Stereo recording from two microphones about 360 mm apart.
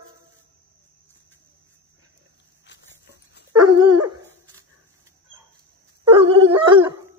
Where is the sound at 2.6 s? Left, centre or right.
Left.